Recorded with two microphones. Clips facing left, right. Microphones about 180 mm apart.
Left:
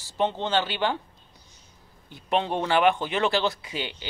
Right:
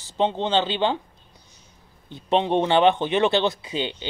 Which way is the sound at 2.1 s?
25° right (ahead or behind).